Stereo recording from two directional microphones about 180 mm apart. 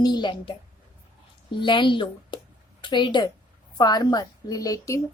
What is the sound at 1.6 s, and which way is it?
A woman's voice, 25° left (ahead or behind).